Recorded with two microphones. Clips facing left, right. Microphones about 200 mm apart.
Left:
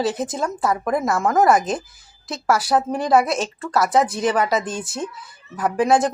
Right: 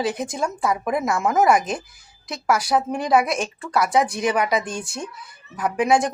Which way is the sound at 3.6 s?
Centre (ahead or behind).